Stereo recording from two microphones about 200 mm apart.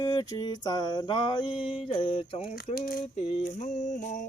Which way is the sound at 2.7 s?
45° left (ahead or behind).